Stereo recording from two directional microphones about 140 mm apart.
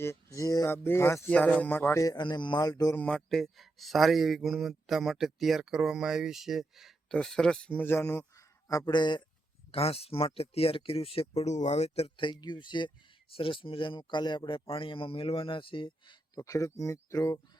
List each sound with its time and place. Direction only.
0.0 s a man's voice: 20° left (ahead or behind)
1.3 s a man's voice: 10° left (ahead or behind); by 2.9 s 25° left (ahead or behind)
2.9 s speech: 10° left (ahead or behind)
8.4 s a sound: 25° left (ahead or behind)
8.9 s speech: 30° left (ahead or behind)
9.7 s speech: 45° left (ahead or behind); by 17.4 s 25° left (ahead or behind)